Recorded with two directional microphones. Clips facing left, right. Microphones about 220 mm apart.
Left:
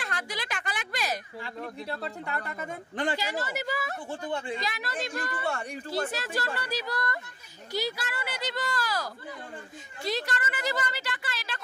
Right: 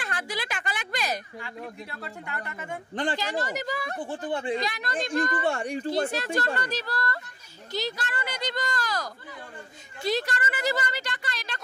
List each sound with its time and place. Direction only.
0.0 s a sound: centre (ahead or behind)
1.4 s speech: 35° left (ahead or behind)
3.2 s speech: 10° left (ahead or behind)
4.3 s speech: 35° right (ahead or behind)
4.6 s speech: centre (ahead or behind)
11.0 s speech: 5° left (ahead or behind)